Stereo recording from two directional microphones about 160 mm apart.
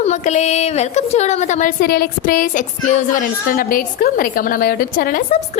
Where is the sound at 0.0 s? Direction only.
45° left (ahead or behind).